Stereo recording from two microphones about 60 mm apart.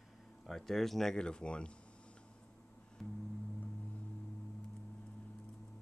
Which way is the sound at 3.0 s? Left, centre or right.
Left.